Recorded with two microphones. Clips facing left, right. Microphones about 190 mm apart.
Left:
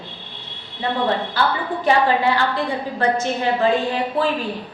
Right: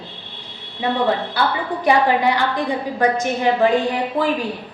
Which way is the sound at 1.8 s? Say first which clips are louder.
Right 1 dB; 15° right (ahead or behind).